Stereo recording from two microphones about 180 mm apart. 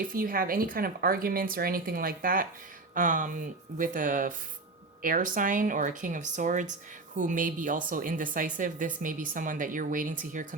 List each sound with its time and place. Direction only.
0.0 s a woman's voice: 50° right (ahead or behind)